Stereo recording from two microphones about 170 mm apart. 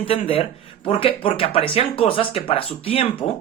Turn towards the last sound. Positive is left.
turn(degrees=35)  # may be behind; listen again after turning